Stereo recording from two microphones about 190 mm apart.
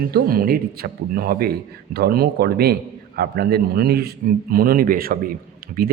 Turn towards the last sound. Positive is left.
turn(degrees=-50)  # may be behind; listen again after turning